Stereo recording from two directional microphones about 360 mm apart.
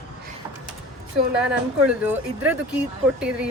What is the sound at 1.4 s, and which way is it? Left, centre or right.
Speech, centre.